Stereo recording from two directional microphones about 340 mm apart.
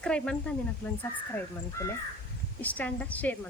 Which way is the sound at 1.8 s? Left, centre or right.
Centre.